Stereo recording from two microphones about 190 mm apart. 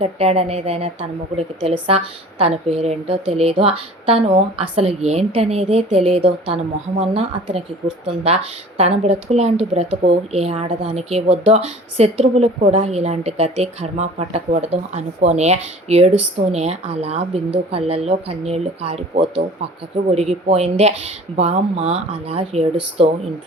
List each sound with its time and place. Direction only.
0.0 s speech: 35° right (ahead or behind)